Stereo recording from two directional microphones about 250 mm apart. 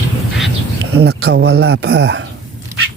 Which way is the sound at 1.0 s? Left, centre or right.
Right.